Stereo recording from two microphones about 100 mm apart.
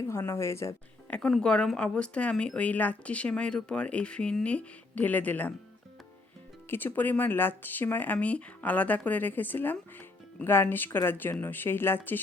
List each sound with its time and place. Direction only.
0.1 s speech: 30° left (ahead or behind)
1.3 s speech: 10° left (ahead or behind)
6.7 s speech: 20° left (ahead or behind)